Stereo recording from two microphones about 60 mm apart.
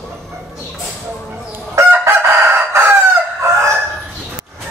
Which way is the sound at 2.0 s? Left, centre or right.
Right.